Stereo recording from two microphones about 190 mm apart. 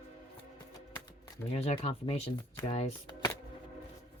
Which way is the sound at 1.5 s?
35° left (ahead or behind).